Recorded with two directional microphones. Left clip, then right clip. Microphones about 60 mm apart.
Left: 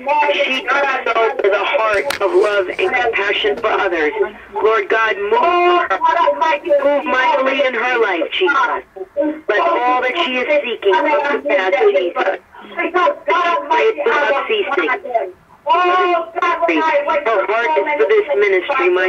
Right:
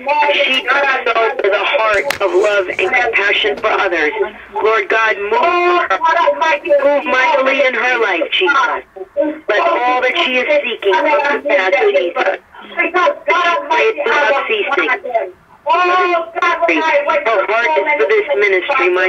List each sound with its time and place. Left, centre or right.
0.1 s speech: centre
2.3 s speech: right
2.8 s speech: centre